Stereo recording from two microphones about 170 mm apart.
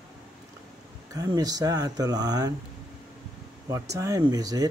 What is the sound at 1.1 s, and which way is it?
Speech, 20° right (ahead or behind).